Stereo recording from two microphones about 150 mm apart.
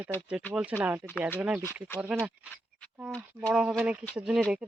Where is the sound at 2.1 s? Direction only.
5° right (ahead or behind).